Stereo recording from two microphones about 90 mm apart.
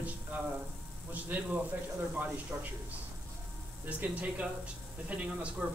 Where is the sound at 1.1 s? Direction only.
20° right (ahead or behind).